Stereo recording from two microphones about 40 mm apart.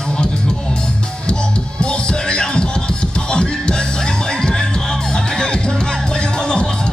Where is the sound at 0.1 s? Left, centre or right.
Left.